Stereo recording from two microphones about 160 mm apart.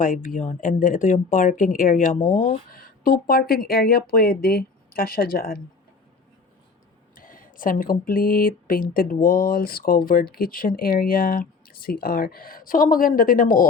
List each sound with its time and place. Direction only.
0.0 s speech: 55° left (ahead or behind)
7.2 s speech: 60° left (ahead or behind)